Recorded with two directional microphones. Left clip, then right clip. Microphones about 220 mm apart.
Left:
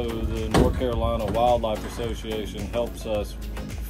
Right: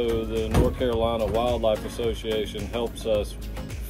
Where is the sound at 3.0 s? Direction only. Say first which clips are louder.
Right 7 dB; 35° right (ahead or behind).